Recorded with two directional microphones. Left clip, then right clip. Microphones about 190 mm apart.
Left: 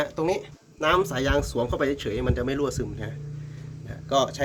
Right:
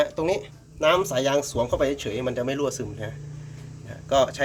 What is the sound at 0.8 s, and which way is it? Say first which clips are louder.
Speech: right 2 dB; 25° left (ahead or behind).